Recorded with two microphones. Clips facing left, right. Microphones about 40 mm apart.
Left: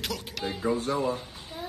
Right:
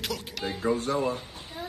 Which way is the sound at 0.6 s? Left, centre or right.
Right.